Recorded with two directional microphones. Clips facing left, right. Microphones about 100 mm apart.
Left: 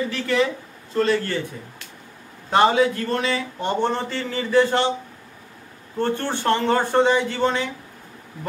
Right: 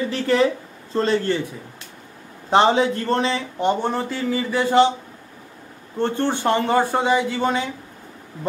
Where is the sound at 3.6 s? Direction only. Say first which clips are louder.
Right 2 dB; 10° right (ahead or behind).